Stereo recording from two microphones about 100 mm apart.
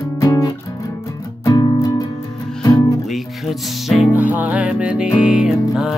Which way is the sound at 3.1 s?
Centre (ahead or behind).